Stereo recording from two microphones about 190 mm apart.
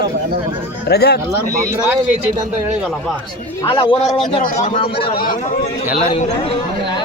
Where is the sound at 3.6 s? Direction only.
25° left (ahead or behind).